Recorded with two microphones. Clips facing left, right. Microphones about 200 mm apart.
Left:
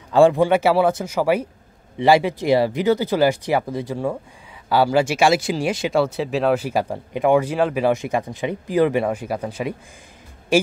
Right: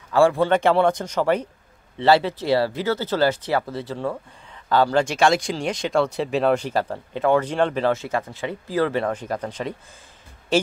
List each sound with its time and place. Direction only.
0.1 s speech: 20° left (ahead or behind)
0.5 s speech: 5° left (ahead or behind)